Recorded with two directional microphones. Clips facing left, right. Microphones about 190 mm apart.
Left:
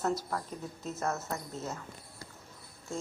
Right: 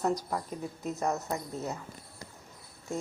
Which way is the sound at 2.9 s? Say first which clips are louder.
Right 3 dB; 15° right (ahead or behind).